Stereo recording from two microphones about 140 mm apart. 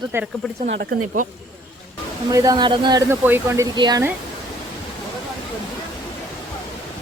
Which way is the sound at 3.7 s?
30° right (ahead or behind).